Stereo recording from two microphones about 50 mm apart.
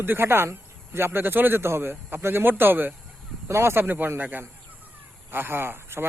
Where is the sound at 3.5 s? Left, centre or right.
Right.